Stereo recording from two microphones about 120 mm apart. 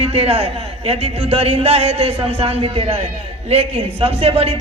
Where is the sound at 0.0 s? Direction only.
60° right (ahead or behind).